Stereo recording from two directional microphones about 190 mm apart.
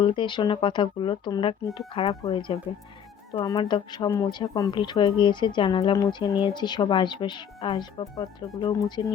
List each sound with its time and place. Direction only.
0.0 s speech: 25° left (ahead or behind)